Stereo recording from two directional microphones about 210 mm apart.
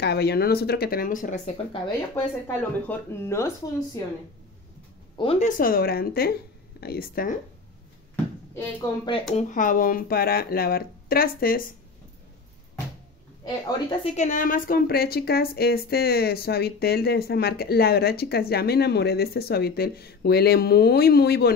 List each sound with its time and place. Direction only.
0.0 s a woman's voice: 50° left (ahead or behind); by 1.8 s 35° left (ahead or behind)
2.4 s speech: 10° left (ahead or behind)
5.1 s speech: 25° left (ahead or behind)
5.6 s a woman's voice: 45° left (ahead or behind)
8.5 s speech: 20° left (ahead or behind)
9.3 s a woman's voice: 35° left (ahead or behind)
13.7 s a woman's voice: 25° left (ahead or behind); by 21.5 s 50° left (ahead or behind)